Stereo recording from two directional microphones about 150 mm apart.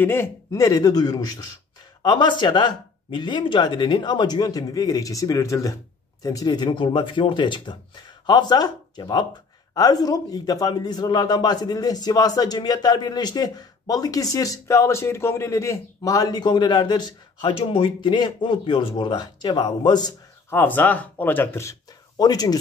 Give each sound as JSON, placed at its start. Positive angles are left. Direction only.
{"t": 0.0, "sound": "a man's voice", "side_deg": 15}